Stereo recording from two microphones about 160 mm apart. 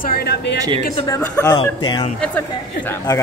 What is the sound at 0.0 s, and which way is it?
Speech, 75° left (ahead or behind).